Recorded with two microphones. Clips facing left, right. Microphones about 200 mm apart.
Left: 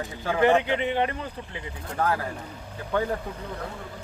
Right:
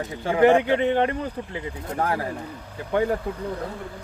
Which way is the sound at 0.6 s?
50° right (ahead or behind).